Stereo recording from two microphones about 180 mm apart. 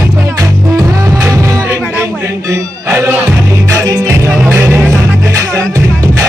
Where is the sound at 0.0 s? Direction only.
15° right (ahead or behind).